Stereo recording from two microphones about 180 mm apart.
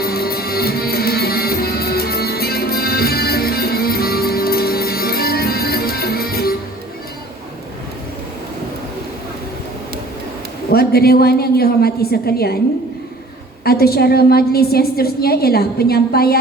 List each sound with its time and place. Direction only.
0.0 s music: 60° left (ahead or behind)
10.7 s a woman's voice: 60° left (ahead or behind)
13.7 s a woman's voice: 60° left (ahead or behind)